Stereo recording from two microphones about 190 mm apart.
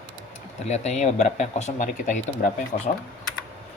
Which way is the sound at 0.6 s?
35° left (ahead or behind).